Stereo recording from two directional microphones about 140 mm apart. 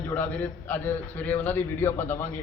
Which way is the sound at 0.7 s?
15° left (ahead or behind).